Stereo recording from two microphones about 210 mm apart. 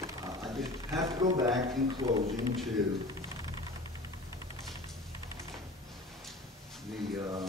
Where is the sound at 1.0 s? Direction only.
15° right (ahead or behind).